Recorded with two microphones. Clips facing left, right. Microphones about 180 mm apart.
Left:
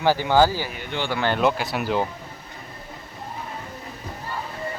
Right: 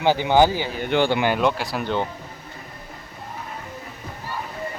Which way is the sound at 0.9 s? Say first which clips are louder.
Right 9 dB; 70° right (ahead or behind).